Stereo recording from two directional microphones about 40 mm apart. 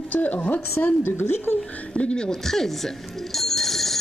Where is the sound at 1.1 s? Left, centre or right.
Left.